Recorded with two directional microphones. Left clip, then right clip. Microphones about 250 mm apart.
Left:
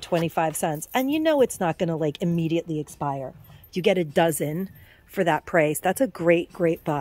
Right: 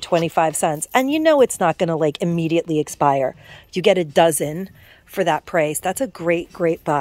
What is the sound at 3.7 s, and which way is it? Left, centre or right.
Speech, centre.